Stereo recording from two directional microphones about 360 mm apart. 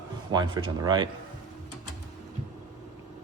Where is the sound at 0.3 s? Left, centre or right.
Centre.